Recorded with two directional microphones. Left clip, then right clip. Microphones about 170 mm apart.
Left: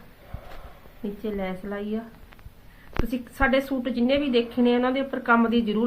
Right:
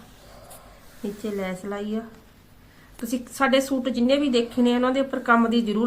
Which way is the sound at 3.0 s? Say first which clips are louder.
Right 2 dB; 10° right (ahead or behind).